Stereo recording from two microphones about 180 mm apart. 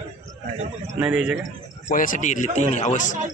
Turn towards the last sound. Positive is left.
turn(degrees=40)  # may be behind; listen again after turning